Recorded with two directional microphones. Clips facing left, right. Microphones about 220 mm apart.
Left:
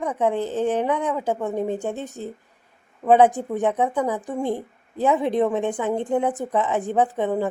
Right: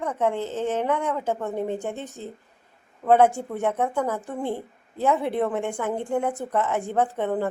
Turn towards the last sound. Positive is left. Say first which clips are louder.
# left 2 dB
turn(degrees=15)  # may be behind; listen again after turning